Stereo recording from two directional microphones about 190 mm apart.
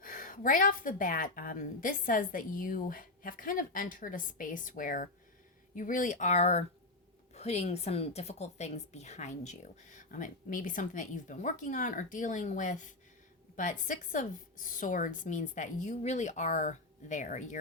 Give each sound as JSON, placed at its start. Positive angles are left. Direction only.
{"t": 0.0, "sound": "a woman's voice", "side_deg": 45}